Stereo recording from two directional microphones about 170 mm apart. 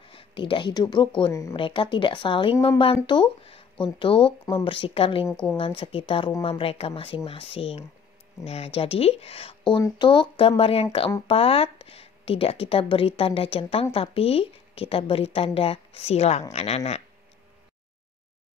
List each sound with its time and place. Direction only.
0.1 s speech: 30° left (ahead or behind)
1.6 s speech: 30° left (ahead or behind)
5.3 s speech: 5° left (ahead or behind)
5.6 s speech: 35° left (ahead or behind)